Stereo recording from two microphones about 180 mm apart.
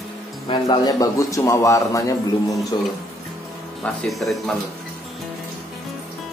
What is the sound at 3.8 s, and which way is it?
Speech, centre (ahead or behind).